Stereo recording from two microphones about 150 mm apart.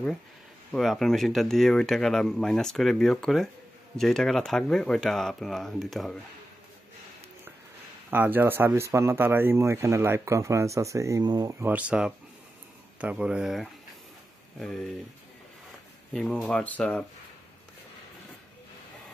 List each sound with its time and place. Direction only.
0.7 s speech: centre (ahead or behind)
8.1 s speech: 15° right (ahead or behind)
11.6 s speech: 10° right (ahead or behind)
16.1 s speech: centre (ahead or behind)